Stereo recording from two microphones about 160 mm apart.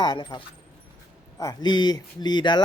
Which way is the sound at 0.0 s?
25° left (ahead or behind).